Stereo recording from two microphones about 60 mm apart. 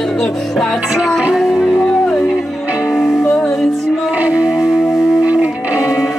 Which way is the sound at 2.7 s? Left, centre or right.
Centre.